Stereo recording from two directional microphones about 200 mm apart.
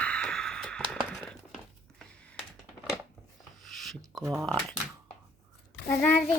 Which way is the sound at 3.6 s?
Centre (ahead or behind).